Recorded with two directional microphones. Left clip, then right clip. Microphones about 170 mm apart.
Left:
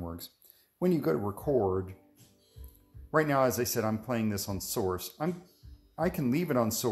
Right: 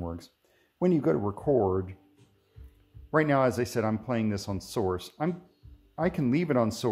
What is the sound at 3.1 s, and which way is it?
Speech, 35° right (ahead or behind).